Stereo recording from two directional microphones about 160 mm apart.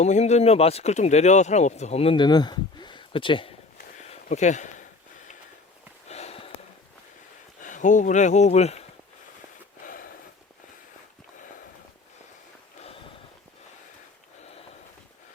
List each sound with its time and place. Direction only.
0.0 s speech: 45° left (ahead or behind)
3.8 s a sound: 45° left (ahead or behind)
6.1 s sniff: 40° left (ahead or behind)
7.6 s speech: 50° left (ahead or behind)
9.8 s wheeze: 60° left (ahead or behind)